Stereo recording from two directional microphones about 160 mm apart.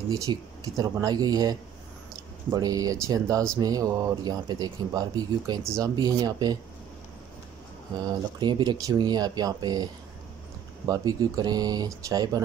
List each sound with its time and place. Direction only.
0.1 s speech: 20° right (ahead or behind)
8.0 s speech: 25° right (ahead or behind)
10.9 s speech: 20° right (ahead or behind)